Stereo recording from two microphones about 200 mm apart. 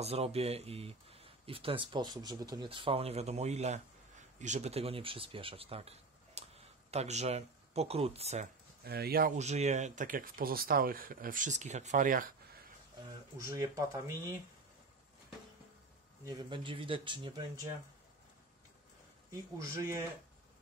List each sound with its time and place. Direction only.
0.0 s speech: 30° right (ahead or behind)
8.8 s speech: 50° right (ahead or behind)
9.4 s speech: 35° right (ahead or behind)
13.4 s speech: 15° right (ahead or behind)
16.3 s speech: 20° right (ahead or behind)
19.3 s speech: 15° right (ahead or behind)